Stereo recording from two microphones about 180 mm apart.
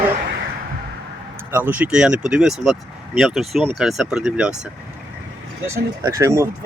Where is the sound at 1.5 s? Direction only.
10° right (ahead or behind).